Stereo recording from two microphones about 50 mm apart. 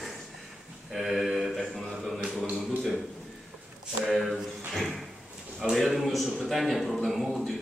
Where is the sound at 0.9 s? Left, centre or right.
Centre.